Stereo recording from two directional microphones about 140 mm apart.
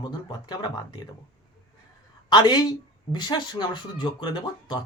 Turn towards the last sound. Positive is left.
turn(degrees=35)  # may be behind; listen again after turning